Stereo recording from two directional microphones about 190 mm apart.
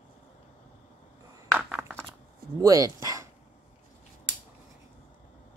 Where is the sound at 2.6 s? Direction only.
20° right (ahead or behind).